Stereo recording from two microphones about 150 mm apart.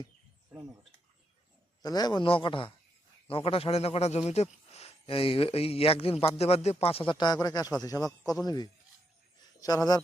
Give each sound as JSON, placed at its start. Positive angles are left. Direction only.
{"t": 1.8, "sound": "speech", "side_deg": 25}